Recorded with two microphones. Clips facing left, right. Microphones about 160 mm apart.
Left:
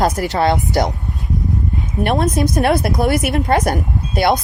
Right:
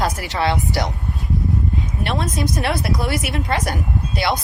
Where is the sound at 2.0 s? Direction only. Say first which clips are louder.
Left 8 dB; 55° left (ahead or behind).